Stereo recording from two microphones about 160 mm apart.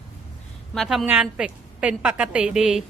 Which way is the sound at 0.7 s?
Centre (ahead or behind).